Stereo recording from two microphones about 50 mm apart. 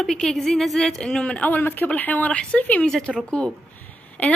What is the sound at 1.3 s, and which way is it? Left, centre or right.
Speech, left.